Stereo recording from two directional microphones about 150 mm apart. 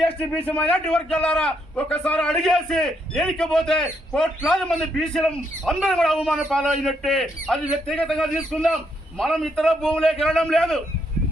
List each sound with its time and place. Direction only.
0.4 s a man's voice: 10° left (ahead or behind)